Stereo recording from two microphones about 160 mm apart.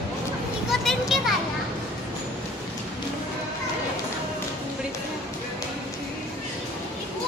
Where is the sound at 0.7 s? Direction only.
Centre (ahead or behind).